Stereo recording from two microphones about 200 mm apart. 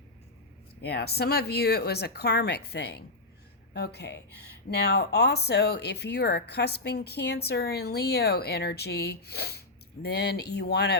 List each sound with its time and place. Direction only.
0.8 s speech: 55° left (ahead or behind)